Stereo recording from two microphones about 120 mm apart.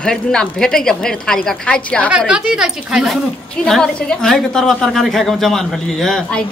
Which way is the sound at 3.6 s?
5° left (ahead or behind).